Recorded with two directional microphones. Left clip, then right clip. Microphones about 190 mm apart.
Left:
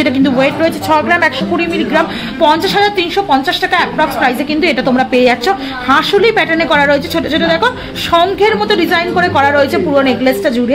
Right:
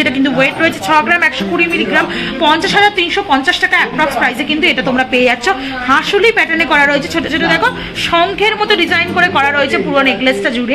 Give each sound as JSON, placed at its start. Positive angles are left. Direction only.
{"t": 0.0, "sound": "a woman's voice", "side_deg": 70}
{"t": 0.6, "sound": "speech", "side_deg": 60}